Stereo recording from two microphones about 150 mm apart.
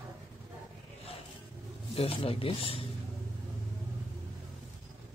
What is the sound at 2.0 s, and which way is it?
Speech, 40° left (ahead or behind).